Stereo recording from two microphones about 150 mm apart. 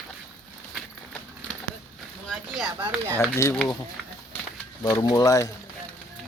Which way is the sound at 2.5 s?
Centre (ahead or behind).